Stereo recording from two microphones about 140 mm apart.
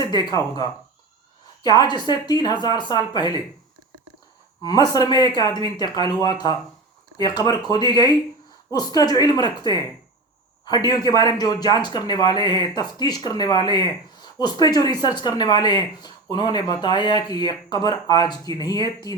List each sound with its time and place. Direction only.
0.0 s speech: 30° left (ahead or behind)
4.6 s speech: 30° left (ahead or behind)